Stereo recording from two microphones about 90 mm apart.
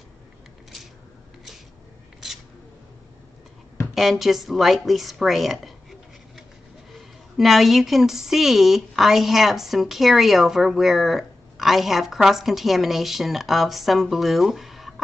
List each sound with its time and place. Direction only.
3.9 s a woman's voice: centre (ahead or behind)